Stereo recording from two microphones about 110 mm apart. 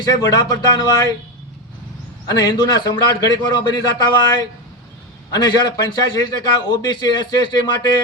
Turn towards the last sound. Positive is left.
turn(degrees=40)  # may be behind; listen again after turning